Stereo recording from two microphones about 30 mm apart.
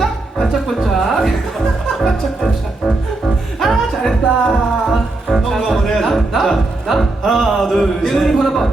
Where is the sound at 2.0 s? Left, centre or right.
Centre.